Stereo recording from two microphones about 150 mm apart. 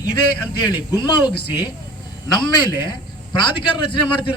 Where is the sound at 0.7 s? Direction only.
30° left (ahead or behind).